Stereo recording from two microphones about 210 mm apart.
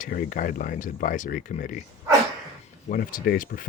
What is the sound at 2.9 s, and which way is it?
Speech, 40° left (ahead or behind).